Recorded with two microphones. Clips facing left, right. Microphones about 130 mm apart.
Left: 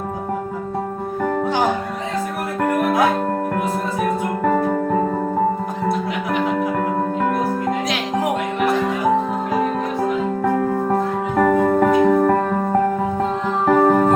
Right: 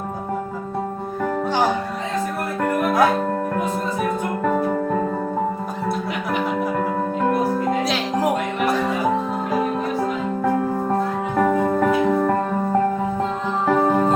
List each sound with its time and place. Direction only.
11.3 s music: 45° left (ahead or behind)
13.7 s music: 40° left (ahead or behind)